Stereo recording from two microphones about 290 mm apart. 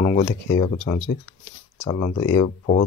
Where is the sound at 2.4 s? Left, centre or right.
Left.